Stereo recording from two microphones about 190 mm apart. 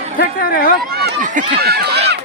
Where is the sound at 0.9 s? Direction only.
50° right (ahead or behind).